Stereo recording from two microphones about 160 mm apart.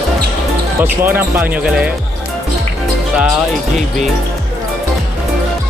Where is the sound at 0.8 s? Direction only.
10° right (ahead or behind).